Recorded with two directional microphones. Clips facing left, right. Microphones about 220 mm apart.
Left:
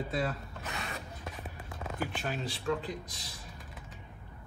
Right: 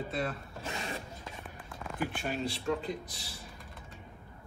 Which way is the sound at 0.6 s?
30° right (ahead or behind).